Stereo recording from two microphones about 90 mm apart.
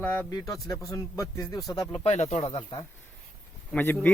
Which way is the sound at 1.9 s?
85° left.